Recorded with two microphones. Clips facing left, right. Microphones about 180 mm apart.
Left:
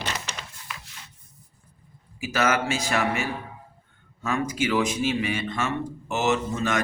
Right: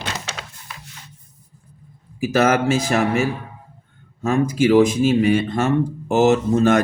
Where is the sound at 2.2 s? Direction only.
50° right (ahead or behind).